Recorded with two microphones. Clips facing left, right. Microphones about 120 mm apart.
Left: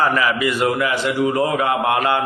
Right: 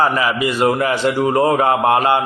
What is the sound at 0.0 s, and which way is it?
A man's voice, 25° right (ahead or behind).